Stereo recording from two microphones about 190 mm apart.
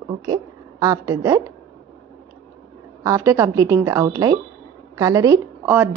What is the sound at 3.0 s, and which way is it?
A woman's voice, 15° right (ahead or behind).